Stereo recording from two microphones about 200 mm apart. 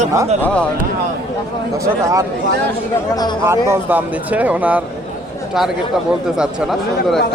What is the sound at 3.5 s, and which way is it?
Speech, 10° right (ahead or behind).